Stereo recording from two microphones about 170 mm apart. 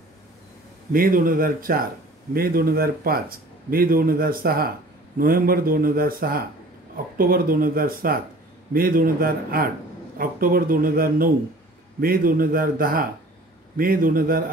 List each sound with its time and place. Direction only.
0.9 s speech: 55° right (ahead or behind)